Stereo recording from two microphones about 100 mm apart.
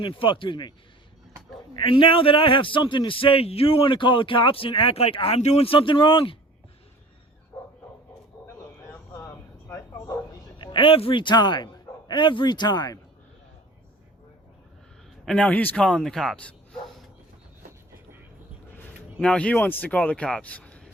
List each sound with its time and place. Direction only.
0.0 s a man's voice: 60° left (ahead or behind)
1.8 s a man's voice: 60° left (ahead or behind)
9.1 s a sound: 25° left (ahead or behind)
10.6 s a man's voice: 55° left (ahead or behind)
15.3 s speech: 10° left (ahead or behind)
19.2 s speech: 10° left (ahead or behind)